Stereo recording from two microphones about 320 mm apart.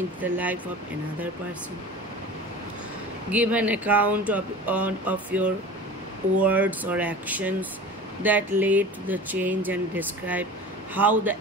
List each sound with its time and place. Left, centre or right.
0.2 s speech: centre
3.3 s speech: centre
6.4 s speech: centre